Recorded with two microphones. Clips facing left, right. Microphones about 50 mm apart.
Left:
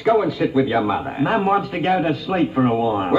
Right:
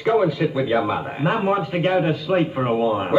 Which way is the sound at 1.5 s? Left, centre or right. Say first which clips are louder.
Left 1 dB; centre.